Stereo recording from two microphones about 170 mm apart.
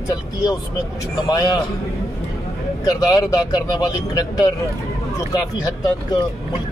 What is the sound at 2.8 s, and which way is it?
Speech, 20° left (ahead or behind).